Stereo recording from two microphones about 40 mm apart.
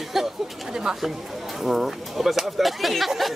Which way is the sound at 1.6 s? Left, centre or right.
Centre.